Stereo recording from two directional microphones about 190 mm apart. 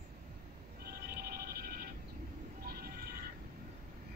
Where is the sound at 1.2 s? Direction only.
55° right (ahead or behind).